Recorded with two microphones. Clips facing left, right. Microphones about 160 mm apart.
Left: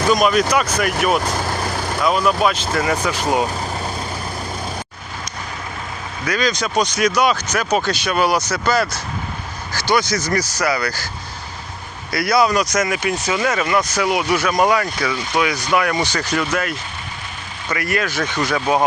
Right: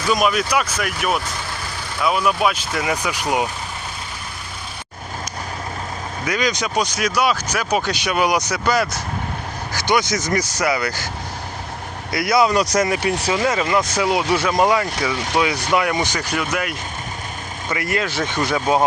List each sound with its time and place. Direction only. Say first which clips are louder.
0.1 s speech: left 2 dB; 5° right (ahead or behind)
1.2 s vehicle: left 7 dB; 45° left (ahead or behind)
2.0 s speech: left 1 dB; 5° right (ahead or behind)
6.2 s speech: left 1 dB; 15° right (ahead or behind)
12.1 s speech: even; 20° right (ahead or behind)
17.7 s speech: left 1 dB; 20° right (ahead or behind)